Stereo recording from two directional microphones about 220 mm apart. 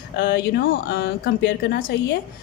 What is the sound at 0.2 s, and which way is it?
Speech, 45° left (ahead or behind).